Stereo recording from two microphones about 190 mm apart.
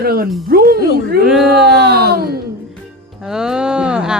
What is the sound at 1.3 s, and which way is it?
Speech, centre (ahead or behind).